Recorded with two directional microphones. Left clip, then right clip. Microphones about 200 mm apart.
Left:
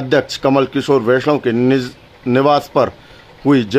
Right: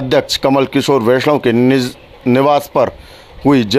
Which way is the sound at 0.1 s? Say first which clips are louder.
Right 1 dB; 15° right (ahead or behind).